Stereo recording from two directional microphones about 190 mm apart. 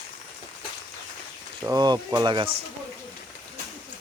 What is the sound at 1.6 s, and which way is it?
Speech, 20° right (ahead or behind).